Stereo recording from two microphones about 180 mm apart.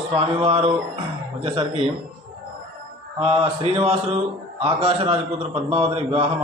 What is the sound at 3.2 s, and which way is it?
A man's voice, 30° right (ahead or behind).